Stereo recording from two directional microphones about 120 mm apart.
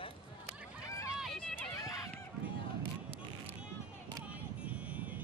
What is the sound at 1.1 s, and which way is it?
Run, 5° right (ahead or behind).